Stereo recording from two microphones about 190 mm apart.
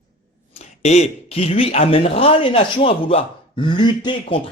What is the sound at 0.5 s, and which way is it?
Speech, 35° left (ahead or behind).